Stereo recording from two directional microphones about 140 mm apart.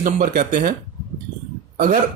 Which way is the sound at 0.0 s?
70° right (ahead or behind).